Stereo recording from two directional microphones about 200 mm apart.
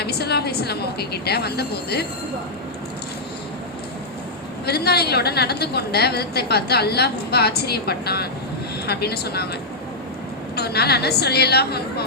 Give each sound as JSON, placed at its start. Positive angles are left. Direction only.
{"t": 0.0, "sound": "a woman's voice", "side_deg": 55}
{"t": 4.6, "sound": "a woman's voice", "side_deg": 55}
{"t": 10.5, "sound": "a woman's voice", "side_deg": 55}